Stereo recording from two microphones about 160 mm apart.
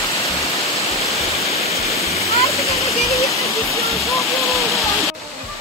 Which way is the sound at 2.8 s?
20° left (ahead or behind).